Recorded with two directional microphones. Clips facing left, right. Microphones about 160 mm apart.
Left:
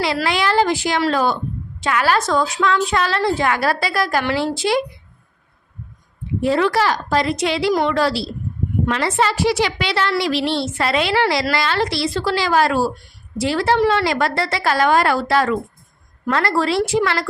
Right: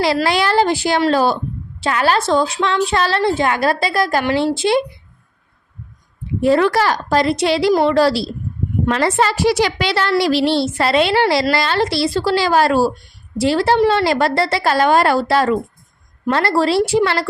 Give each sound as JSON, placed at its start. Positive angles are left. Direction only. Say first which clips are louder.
{"t": 0.0, "sound": "a woman's voice", "louder": "right 3 dB", "side_deg": -35}
{"t": 6.4, "sound": "a woman's voice", "louder": "right 3 dB", "side_deg": -45}